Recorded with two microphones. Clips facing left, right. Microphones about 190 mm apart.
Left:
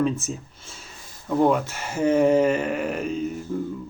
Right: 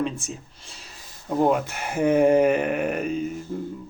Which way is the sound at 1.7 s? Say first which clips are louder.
Right 2 dB; 60° right (ahead or behind).